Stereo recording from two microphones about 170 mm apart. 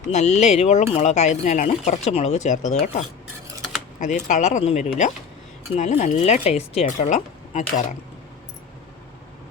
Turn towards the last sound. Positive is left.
turn(degrees=45)  # may be behind; listen again after turning